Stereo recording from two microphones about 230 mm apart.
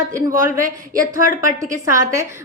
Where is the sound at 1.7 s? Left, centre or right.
Centre.